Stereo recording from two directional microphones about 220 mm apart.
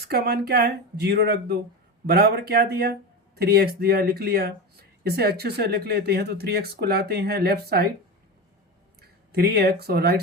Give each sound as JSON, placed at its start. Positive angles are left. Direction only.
{"t": 0.0, "sound": "speech", "side_deg": -45}
{"t": 9.0, "sound": "speech", "side_deg": -45}